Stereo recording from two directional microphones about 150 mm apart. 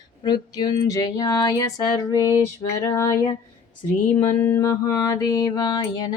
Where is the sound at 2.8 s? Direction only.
25° left (ahead or behind).